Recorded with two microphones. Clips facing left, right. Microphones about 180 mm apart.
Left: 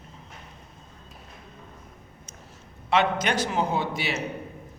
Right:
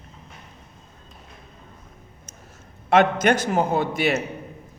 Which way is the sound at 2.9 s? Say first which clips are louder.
Right 6 dB; 50° right (ahead or behind).